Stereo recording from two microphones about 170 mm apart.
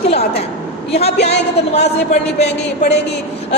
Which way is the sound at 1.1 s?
75° left (ahead or behind).